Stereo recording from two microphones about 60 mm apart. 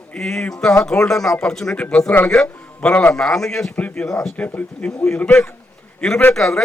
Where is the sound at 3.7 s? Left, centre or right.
Left.